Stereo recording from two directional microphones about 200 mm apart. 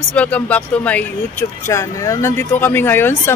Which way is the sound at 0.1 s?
5° left (ahead or behind).